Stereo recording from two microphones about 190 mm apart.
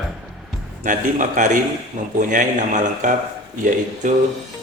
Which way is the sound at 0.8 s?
40° right (ahead or behind).